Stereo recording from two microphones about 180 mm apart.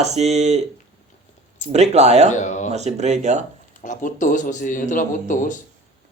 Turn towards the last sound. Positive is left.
turn(degrees=45)  # may be behind; listen again after turning